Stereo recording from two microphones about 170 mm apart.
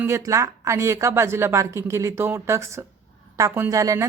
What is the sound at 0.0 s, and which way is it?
A woman's voice, 15° right (ahead or behind).